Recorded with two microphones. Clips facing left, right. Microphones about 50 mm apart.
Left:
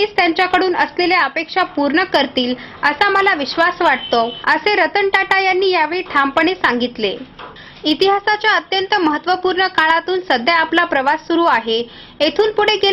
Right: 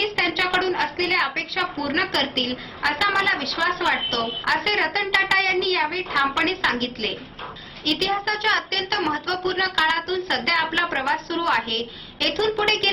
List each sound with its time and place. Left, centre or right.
0.0 s a woman's voice: left
9.6 s a woman's voice: left